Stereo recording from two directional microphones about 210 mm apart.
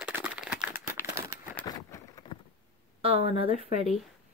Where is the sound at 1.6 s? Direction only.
20° left (ahead or behind).